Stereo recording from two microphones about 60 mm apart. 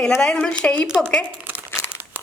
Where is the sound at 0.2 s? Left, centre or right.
Centre.